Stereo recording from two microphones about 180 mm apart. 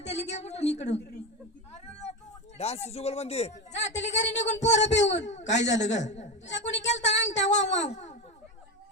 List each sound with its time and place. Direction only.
0.0 s a woman's voice: 35° left (ahead or behind)
1.7 s a sound: 40° left (ahead or behind)
2.6 s a woman's voice: 35° left (ahead or behind)